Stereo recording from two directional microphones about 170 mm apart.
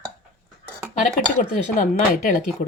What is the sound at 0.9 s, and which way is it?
Speech, 45° left (ahead or behind).